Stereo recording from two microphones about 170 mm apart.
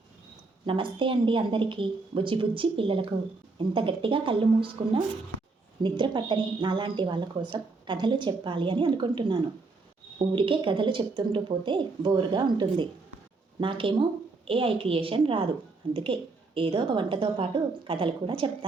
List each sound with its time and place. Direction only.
0.6 s a woman's voice: 30° right (ahead or behind)
5.8 s a woman's voice: 25° right (ahead or behind)